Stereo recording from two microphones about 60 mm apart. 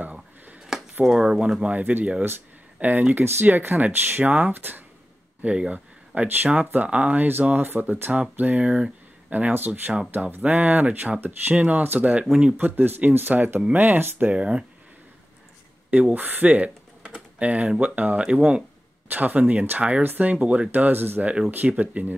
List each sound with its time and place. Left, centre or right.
0.7 s a sound: centre
1.0 s speech: centre; by 4.8 s right
5.4 s speech: right
9.9 s speech: centre
10.4 s speech: right
12.5 s speech: right
14.3 s speech: centre
15.9 s speech: right
19.0 s speech: right